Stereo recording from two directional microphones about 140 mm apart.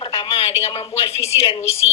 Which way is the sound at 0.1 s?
40° left (ahead or behind).